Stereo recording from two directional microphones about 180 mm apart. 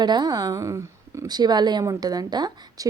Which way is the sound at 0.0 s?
25° right (ahead or behind).